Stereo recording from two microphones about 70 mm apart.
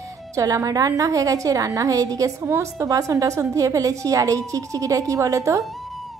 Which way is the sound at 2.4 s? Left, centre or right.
Right.